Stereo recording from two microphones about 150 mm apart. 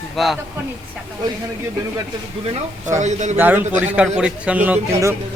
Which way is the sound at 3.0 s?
50° right (ahead or behind).